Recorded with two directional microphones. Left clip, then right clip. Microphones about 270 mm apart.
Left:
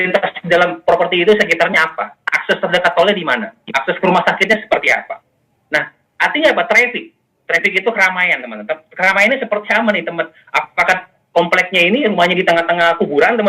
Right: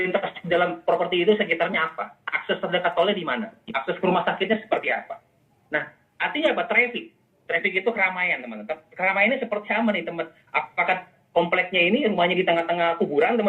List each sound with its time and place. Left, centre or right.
0.0 s a man's voice: left